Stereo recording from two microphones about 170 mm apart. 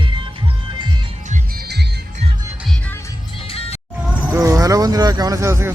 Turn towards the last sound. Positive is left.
turn(degrees=-15)  # may be behind; listen again after turning